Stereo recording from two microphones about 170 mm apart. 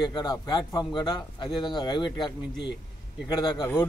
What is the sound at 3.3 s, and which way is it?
Speech, 25° left (ahead or behind).